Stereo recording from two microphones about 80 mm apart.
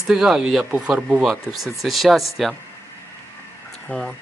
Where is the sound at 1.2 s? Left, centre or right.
Centre.